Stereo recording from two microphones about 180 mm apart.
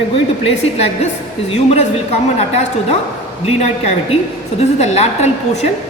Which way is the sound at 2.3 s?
35° left (ahead or behind).